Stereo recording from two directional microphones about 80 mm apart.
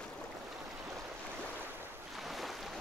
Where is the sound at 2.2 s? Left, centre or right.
Centre.